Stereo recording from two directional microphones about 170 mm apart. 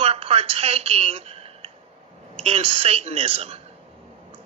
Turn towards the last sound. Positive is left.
turn(degrees=-35)  # may be behind; listen again after turning